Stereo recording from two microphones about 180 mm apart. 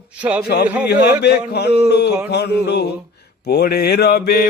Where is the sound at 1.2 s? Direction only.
65° left (ahead or behind).